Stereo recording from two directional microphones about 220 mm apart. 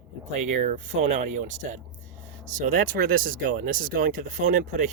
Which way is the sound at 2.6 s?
40° right (ahead or behind).